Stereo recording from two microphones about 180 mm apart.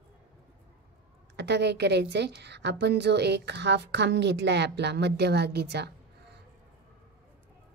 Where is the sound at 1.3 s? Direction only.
70° right (ahead or behind).